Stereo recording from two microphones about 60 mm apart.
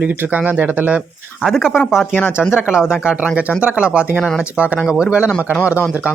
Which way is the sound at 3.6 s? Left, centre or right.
Centre.